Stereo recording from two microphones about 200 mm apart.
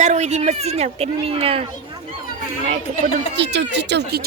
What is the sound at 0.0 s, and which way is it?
Speech, 35° right (ahead or behind).